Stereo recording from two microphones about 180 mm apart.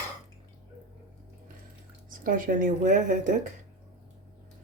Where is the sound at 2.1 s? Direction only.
50° right (ahead or behind).